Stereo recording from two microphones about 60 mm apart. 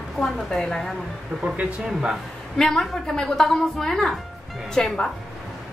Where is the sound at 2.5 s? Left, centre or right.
Centre.